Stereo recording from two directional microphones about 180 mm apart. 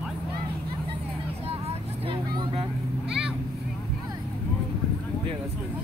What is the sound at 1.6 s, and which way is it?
Vehicle, 30° right (ahead or behind).